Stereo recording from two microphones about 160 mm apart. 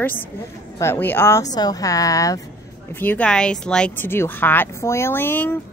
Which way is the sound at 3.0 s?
10° left (ahead or behind).